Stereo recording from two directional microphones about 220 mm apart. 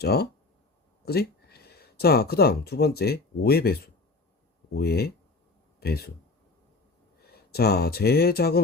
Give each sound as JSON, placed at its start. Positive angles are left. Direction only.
{"t": 0.0, "sound": "speech", "side_deg": 45}
{"t": 7.3, "sound": "speech", "side_deg": 45}